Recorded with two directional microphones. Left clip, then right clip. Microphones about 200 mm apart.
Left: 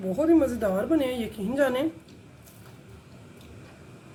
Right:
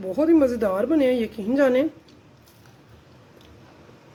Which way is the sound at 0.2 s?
40° right (ahead or behind).